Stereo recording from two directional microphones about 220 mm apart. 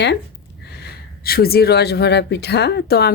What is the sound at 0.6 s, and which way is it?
Speech, 45° left (ahead or behind).